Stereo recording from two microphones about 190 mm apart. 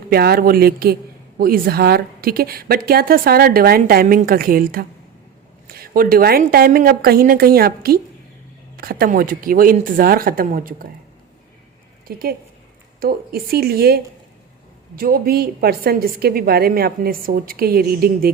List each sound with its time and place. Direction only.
0.1 s a woman's voice: 55° right (ahead or behind)
12.0 s a woman's voice: 50° right (ahead or behind)